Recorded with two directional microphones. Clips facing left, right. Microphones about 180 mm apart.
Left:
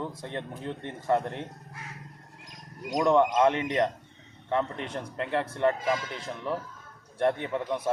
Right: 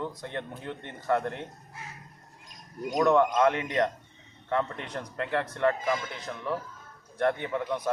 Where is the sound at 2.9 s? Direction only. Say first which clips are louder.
Even; 25° left (ahead or behind).